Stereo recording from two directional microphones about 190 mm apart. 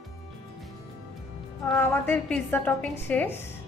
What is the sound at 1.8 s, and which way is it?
A woman's voice, 10° left (ahead or behind).